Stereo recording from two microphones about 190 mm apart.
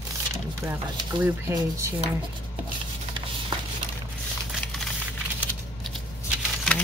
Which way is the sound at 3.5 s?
25° right (ahead or behind).